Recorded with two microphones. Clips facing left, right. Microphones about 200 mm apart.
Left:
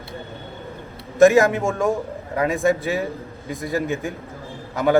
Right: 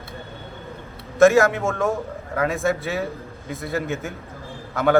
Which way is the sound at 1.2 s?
15° left (ahead or behind).